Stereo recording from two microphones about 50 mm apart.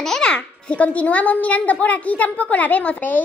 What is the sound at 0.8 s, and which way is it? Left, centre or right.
A woman's voice, left.